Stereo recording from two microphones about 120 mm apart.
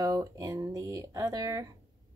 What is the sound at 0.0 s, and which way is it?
Speech, 30° right (ahead or behind).